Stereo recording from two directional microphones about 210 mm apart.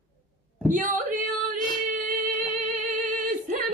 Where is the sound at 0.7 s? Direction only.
40° right (ahead or behind).